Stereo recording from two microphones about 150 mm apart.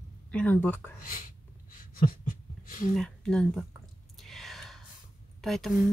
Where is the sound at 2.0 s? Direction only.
65° left (ahead or behind).